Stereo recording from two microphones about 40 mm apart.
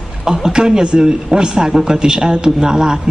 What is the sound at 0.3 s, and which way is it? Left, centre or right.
A woman's voice, centre.